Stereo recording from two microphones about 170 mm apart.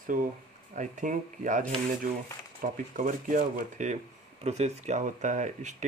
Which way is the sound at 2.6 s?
50° right (ahead or behind).